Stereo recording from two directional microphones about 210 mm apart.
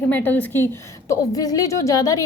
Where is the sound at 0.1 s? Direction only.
10° left (ahead or behind).